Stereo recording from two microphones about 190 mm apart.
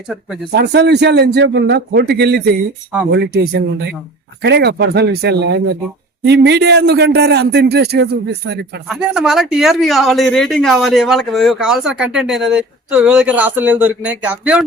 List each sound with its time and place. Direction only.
0.5 s a man's voice: 60° right (ahead or behind)
8.9 s speech: 5° right (ahead or behind)